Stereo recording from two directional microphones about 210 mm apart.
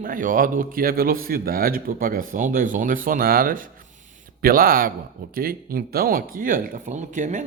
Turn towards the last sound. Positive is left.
turn(degrees=-35)  # may be behind; listen again after turning